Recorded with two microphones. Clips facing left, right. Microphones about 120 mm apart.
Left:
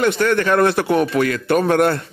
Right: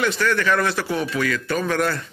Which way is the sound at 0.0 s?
50° left (ahead or behind).